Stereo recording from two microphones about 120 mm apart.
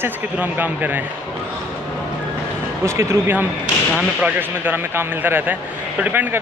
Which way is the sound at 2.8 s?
25° right (ahead or behind).